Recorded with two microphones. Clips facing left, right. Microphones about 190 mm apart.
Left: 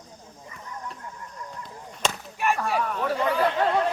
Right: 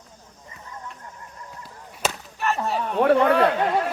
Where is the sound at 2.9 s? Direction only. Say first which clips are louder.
Right 11 dB; 65° right (ahead or behind).